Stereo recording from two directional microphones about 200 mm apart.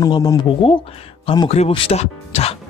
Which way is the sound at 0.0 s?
20° left (ahead or behind).